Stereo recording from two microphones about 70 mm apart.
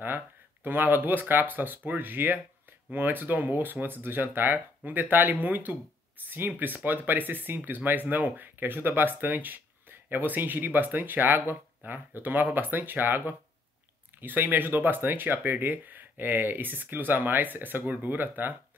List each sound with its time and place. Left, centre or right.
0.7 s speech: right